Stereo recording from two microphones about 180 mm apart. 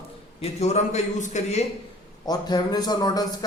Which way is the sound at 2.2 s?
20° left (ahead or behind).